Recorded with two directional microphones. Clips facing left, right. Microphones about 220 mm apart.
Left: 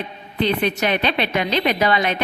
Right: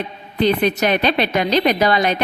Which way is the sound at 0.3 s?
40° right (ahead or behind).